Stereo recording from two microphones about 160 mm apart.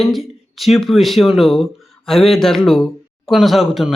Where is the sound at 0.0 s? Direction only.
Centre (ahead or behind).